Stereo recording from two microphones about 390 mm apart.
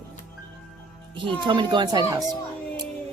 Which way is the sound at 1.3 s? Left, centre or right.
Centre.